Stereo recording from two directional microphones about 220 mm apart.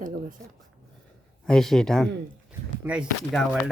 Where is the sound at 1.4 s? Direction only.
Centre (ahead or behind).